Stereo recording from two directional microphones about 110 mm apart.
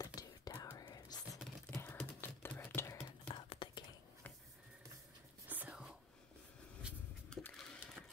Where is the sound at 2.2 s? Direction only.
20° left (ahead or behind).